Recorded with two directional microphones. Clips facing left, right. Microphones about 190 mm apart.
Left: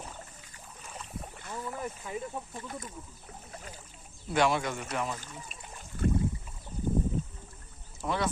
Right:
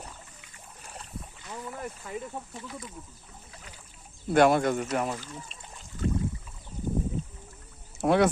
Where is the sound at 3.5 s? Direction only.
40° left (ahead or behind).